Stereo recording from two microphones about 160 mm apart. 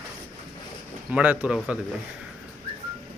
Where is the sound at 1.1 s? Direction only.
10° right (ahead or behind).